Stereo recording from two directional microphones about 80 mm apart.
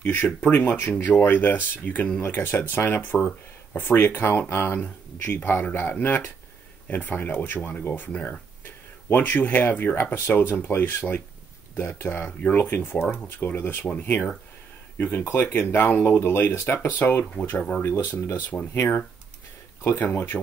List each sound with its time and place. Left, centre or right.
0.0 s speech: left
2.2 s speech: left
19.8 s speech: left